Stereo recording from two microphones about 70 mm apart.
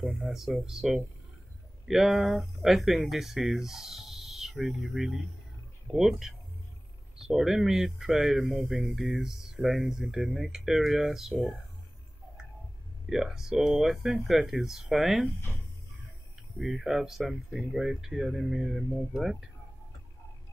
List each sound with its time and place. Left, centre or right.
0.1 s speech: centre
13.1 s speech: centre
16.5 s speech: centre